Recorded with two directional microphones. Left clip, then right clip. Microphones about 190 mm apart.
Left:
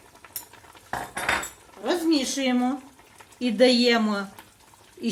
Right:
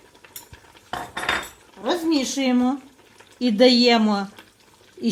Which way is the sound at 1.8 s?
45° right (ahead or behind).